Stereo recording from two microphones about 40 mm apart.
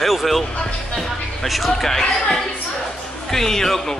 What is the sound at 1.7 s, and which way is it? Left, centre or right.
Speech, centre.